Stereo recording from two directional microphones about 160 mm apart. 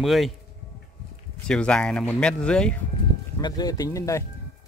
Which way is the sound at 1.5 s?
5° left (ahead or behind).